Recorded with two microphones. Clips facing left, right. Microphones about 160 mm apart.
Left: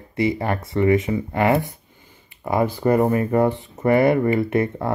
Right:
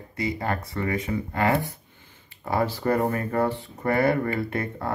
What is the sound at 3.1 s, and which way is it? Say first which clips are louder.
Speech: left 6 dB; 20° left (ahead or behind).